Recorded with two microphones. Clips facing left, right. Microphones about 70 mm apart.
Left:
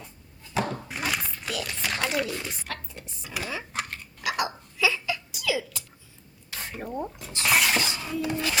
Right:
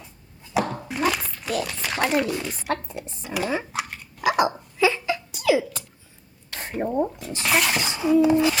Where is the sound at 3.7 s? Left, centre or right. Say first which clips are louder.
Right 3 dB; centre.